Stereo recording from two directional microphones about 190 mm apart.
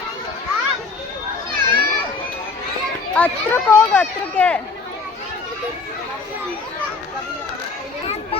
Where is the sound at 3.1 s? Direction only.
10° left (ahead or behind).